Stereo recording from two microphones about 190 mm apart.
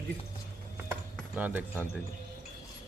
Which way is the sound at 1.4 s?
10° right (ahead or behind).